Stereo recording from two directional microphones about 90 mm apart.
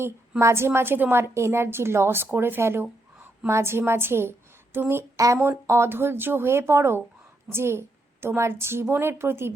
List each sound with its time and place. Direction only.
0.0 s a woman's voice: 30° right (ahead or behind)
5.1 s a woman's voice: 40° right (ahead or behind)